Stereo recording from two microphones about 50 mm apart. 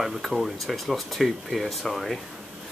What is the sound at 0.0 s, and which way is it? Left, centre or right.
Speech, centre.